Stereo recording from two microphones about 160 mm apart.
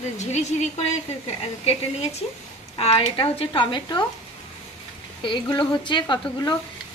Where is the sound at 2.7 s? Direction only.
35° left (ahead or behind).